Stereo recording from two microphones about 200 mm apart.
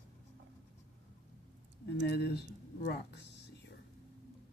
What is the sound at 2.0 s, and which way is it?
Speech, 55° left (ahead or behind).